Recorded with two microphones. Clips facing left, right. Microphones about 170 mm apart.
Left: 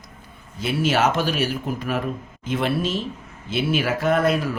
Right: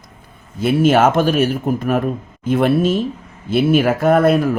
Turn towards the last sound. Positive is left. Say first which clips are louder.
# right 7 dB
turn(degrees=-50)  # may be behind; listen again after turning